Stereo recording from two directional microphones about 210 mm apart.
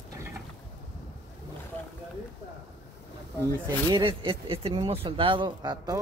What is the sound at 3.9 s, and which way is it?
Speech, 20° right (ahead or behind).